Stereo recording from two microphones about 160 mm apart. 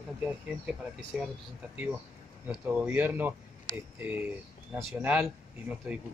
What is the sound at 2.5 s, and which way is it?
A man's voice, 5° right (ahead or behind).